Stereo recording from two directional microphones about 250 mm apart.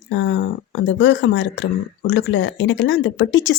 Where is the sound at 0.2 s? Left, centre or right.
Left.